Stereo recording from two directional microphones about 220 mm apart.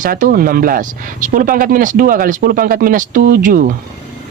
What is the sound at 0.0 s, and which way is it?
Speech, 40° right (ahead or behind).